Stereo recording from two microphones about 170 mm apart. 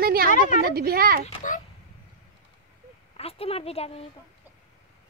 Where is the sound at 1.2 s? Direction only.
50° left (ahead or behind).